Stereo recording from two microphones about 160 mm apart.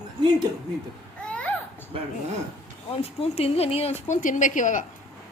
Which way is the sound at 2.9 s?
40° left (ahead or behind).